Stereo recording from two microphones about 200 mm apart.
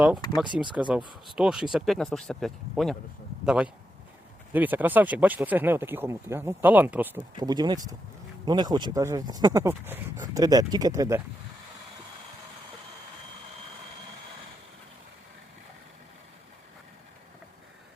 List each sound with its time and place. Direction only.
0.8 s speech: 5° right (ahead or behind)
7.3 s speech: 20° right (ahead or behind)